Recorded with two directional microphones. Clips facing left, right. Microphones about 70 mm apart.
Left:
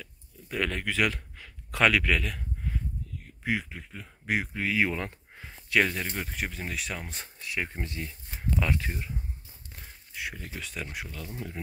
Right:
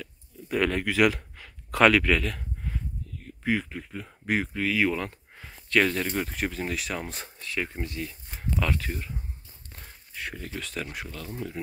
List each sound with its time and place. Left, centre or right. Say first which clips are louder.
0.0 s a sound: right 5 dB; centre
3.3 s speech: right 4 dB; centre
4.6 s speech: right 2 dB; left
5.7 s speech: right 2 dB; centre
7.3 s speech: right 1 dB; centre
8.1 s speech: even; centre
8.5 s speech: right 1 dB; left
10.1 s speech: right 2 dB; centre
11.6 s speech: right 4 dB; left